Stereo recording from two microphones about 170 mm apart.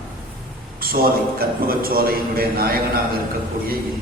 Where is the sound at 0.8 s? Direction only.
60° right (ahead or behind).